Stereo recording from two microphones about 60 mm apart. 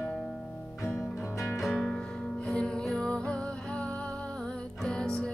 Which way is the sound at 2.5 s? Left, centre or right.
Centre.